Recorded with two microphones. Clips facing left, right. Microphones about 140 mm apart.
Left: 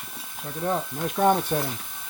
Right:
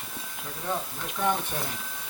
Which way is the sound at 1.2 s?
50° left (ahead or behind).